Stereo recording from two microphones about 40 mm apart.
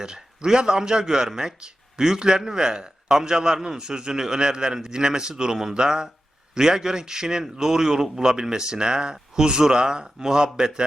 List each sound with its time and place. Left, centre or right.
0.0 s a man's voice: centre